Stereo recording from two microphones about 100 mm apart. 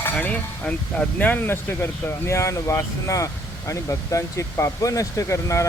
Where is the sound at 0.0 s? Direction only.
15° left (ahead or behind).